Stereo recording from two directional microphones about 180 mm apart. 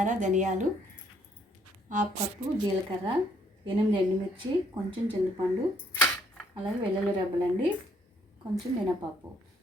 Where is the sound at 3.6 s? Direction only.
25° right (ahead or behind).